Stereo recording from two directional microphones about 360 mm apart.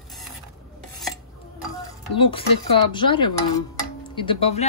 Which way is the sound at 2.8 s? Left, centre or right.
Centre.